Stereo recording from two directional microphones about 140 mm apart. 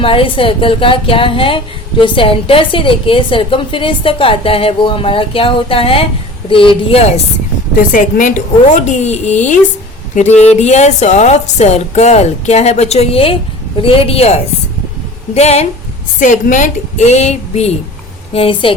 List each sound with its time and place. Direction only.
0.0 s speech: 40° left (ahead or behind)
7.8 s a woman's voice: 75° left (ahead or behind)
8.7 s a woman's voice: 55° left (ahead or behind)
15.4 s speech: 50° left (ahead or behind)
16.2 s a woman's voice: 65° left (ahead or behind); by 18.7 s 40° left (ahead or behind)